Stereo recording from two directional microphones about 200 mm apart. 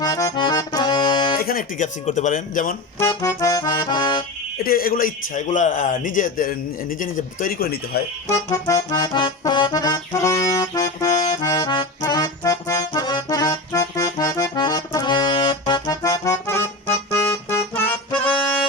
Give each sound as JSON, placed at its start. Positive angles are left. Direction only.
{"t": 0.0, "sound": "accordion", "side_deg": 15}
{"t": 1.4, "sound": "a man's voice", "side_deg": 45}
{"t": 3.0, "sound": "accordion", "side_deg": 15}
{"t": 4.5, "sound": "a man's voice", "side_deg": 45}
{"t": 8.4, "sound": "accordion", "side_deg": 20}
{"t": 17.1, "sound": "music", "side_deg": 10}